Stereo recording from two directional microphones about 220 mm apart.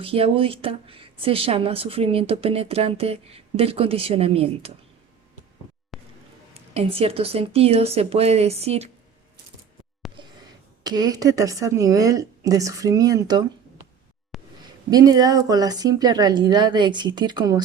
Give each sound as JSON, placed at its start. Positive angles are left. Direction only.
{"t": 0.0, "sound": "a woman's voice", "side_deg": -25}
{"t": 5.9, "sound": "music", "side_deg": 0}
{"t": 6.5, "sound": "a woman's voice", "side_deg": -25}
{"t": 10.2, "sound": "a sound", "side_deg": -20}
{"t": 10.8, "sound": "speech", "side_deg": -15}
{"t": 14.3, "sound": "a sound", "side_deg": 0}
{"t": 14.8, "sound": "speech", "side_deg": -15}